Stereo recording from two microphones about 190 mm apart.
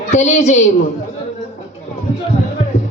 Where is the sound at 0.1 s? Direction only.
40° left (ahead or behind).